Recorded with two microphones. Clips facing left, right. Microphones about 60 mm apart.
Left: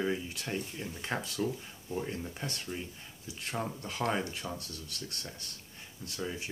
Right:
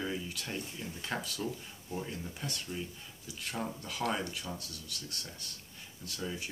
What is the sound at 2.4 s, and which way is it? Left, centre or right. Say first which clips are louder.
Speech: left 1 dB; left.